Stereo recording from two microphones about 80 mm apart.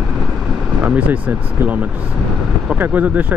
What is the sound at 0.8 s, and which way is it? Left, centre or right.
Speech, centre.